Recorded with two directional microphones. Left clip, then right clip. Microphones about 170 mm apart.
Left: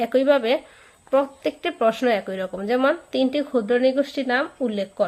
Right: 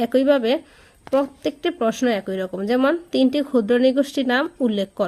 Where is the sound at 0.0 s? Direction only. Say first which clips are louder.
Right 1 dB; 45° right (ahead or behind).